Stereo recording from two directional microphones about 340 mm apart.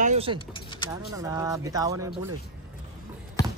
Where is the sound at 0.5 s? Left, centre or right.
Centre.